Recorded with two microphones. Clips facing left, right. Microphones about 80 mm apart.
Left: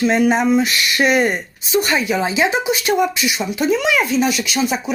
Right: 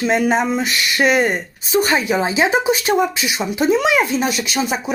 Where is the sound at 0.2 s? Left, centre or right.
Right.